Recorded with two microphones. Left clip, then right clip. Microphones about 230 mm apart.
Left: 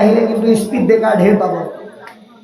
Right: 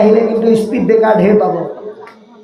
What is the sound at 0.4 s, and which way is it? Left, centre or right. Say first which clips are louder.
Speech: right 2 dB; centre.